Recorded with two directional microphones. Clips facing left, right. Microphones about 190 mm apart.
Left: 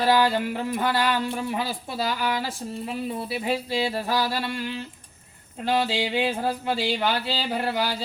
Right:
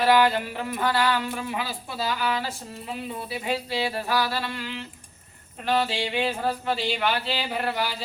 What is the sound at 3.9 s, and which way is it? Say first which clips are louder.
Speech: left 1 dB; 15° left (ahead or behind).